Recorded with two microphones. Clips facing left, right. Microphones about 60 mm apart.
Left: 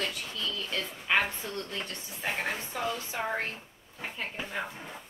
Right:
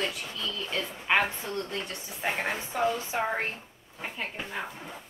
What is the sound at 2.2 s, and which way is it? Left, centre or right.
Speech, centre.